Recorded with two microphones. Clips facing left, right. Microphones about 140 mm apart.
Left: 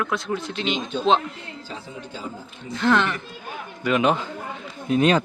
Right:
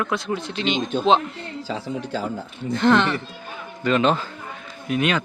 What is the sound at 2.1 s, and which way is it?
Speech, 75° right (ahead or behind).